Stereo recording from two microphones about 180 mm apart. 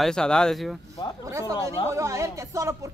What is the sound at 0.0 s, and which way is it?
Speech, 5° left (ahead or behind).